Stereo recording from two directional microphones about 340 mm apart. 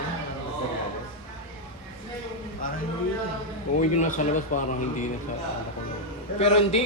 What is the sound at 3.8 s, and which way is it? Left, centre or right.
Speech, left.